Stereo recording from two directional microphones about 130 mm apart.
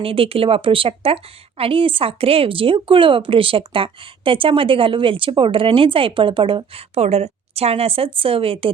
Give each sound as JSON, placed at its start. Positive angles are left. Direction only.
{"t": 0.0, "sound": "speech", "side_deg": -45}